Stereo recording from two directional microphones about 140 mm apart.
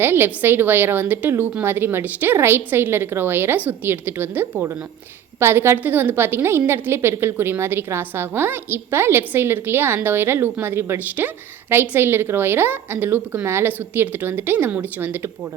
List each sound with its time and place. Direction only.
0.0 s a woman's voice: 15° right (ahead or behind)